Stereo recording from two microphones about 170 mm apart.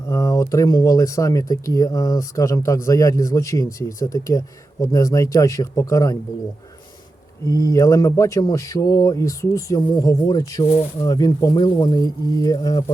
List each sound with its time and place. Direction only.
0.1 s speech: 20° left (ahead or behind)
7.4 s speech: 20° left (ahead or behind)